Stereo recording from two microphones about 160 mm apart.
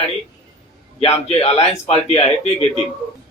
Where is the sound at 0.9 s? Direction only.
40° left (ahead or behind).